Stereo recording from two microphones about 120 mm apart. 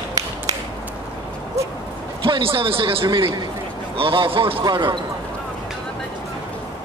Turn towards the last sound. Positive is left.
turn(degrees=-40)  # may be behind; listen again after turning